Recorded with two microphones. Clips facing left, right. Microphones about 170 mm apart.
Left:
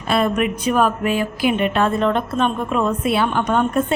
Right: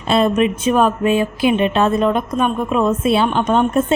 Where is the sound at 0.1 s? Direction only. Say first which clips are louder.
Right 4 dB; 25° right (ahead or behind).